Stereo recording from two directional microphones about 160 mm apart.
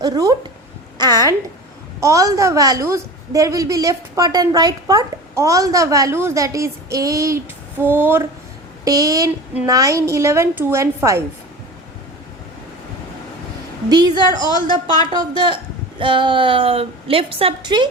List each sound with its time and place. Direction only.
0.0 s a woman's voice: 25° right (ahead or behind)
14.1 s a woman's voice: 25° left (ahead or behind)
15.1 s a woman's voice: 30° right (ahead or behind)